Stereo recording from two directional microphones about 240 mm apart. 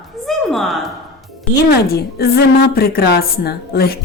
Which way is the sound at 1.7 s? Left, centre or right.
Left.